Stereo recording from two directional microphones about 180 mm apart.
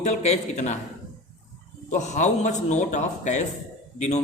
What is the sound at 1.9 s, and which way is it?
A man's voice, 40° left (ahead or behind).